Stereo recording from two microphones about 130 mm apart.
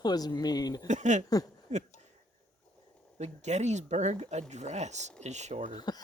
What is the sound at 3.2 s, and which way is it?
Speech, 65° right (ahead or behind).